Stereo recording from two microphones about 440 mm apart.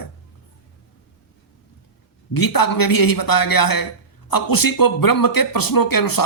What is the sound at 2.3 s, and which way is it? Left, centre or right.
A man's voice, left.